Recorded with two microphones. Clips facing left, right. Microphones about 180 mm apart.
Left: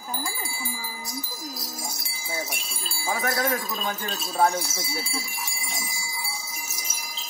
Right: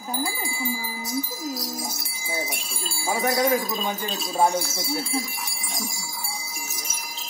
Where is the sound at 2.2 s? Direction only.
10° right (ahead or behind).